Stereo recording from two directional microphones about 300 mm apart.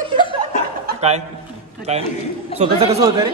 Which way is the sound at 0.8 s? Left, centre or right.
Right.